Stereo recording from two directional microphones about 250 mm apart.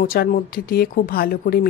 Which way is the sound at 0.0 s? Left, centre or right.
Left.